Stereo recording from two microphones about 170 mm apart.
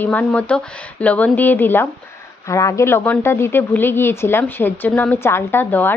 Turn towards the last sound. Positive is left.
turn(degrees=10)  # may be behind; listen again after turning